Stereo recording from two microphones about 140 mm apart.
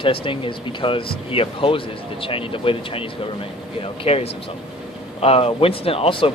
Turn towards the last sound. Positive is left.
turn(degrees=40)  # may be behind; listen again after turning